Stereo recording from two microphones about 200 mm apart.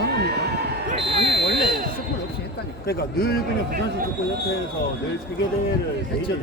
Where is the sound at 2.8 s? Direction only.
50° left (ahead or behind).